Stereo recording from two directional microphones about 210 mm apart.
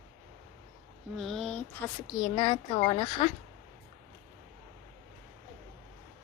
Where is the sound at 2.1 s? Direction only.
20° left (ahead or behind).